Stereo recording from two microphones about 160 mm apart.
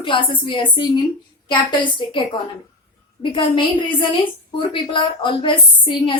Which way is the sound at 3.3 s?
30° left (ahead or behind).